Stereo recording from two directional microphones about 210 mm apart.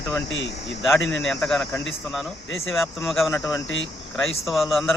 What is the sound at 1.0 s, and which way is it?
Speech, 60° left (ahead or behind).